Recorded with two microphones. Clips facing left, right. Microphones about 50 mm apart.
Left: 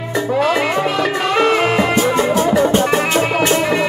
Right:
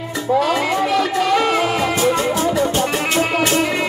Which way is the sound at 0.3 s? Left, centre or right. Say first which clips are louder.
Even; left.